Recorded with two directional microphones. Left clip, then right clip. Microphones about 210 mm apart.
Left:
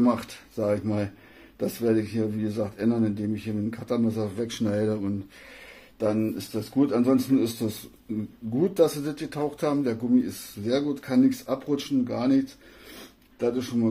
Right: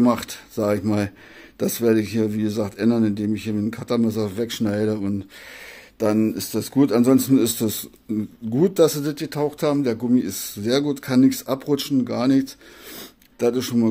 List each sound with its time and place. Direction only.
0.0 s speech: 40° right (ahead or behind)
5.9 s speech: 45° right (ahead or behind)
12.9 s a sound: 50° right (ahead or behind)